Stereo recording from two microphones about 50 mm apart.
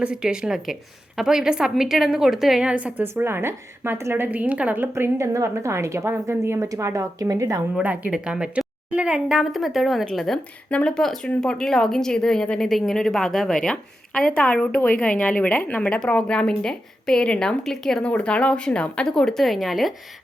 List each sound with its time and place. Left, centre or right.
0.0 s a woman's voice: centre
2.6 s a woman's voice: right
3.0 s a woman's voice: right
4.3 s a woman's voice: right
4.7 s a woman's voice: right
5.1 s a woman's voice: right
7.8 s a woman's voice: right
8.1 s a woman's voice: centre
9.4 s speech: centre
14.3 s a woman's voice: left
17.6 s speech: centre
18.0 s a woman's voice: left; by 19.9 s centre